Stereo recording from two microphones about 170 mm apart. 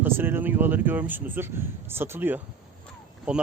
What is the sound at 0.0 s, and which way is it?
Speech, 10° right (ahead or behind).